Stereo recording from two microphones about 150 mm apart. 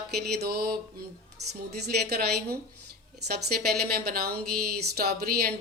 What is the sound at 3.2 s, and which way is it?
Speech, 90° right.